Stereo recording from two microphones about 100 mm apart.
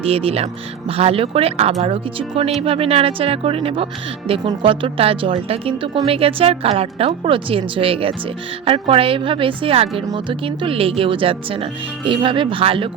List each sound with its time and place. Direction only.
0.0 s speech: 75° right (ahead or behind)
1.8 s speech: 70° right (ahead or behind)
10.2 s speech: 60° right (ahead or behind)